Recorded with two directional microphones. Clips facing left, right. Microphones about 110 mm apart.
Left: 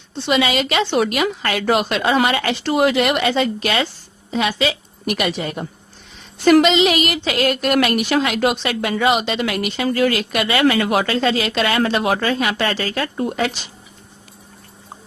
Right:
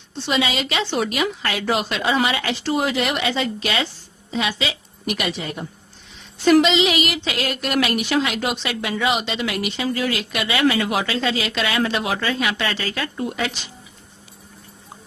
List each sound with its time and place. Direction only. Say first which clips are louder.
0.3 s a woman's voice: left 4 dB; 60° left (ahead or behind); by 13.5 s 45° left (ahead or behind)